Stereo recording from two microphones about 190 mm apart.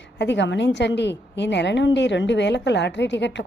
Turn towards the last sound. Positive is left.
turn(degrees=70)  # may be behind; listen again after turning